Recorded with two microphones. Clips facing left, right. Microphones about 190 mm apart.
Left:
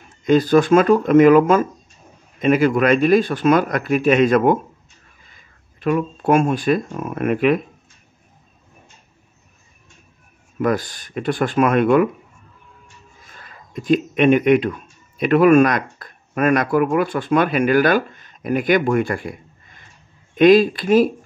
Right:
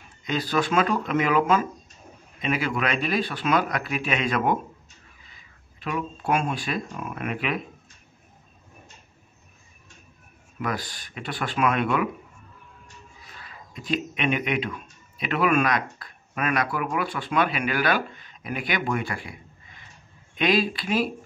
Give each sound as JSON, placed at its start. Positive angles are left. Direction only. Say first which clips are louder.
{"t": 0.2, "sound": "speech", "louder": "left 12 dB", "side_deg": 45}
{"t": 10.6, "sound": "speech", "louder": "left 10 dB", "side_deg": 45}
{"t": 13.2, "sound": "speech", "louder": "left 2 dB", "side_deg": 45}